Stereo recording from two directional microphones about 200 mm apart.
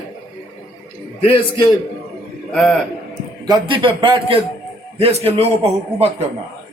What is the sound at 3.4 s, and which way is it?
A man's voice, 20° right (ahead or behind).